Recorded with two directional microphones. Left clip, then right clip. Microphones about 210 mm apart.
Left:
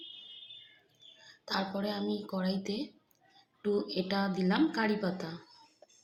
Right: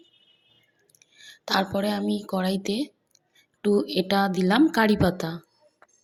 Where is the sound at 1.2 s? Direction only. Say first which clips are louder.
Right 10 dB; 40° right (ahead or behind).